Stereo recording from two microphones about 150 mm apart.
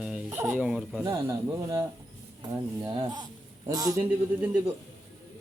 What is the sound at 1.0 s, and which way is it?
Speech, 20° right (ahead or behind).